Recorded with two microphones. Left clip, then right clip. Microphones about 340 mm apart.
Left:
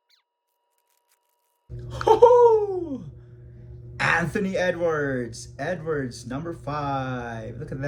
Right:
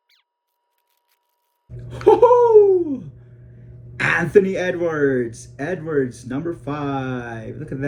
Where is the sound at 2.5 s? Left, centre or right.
Centre.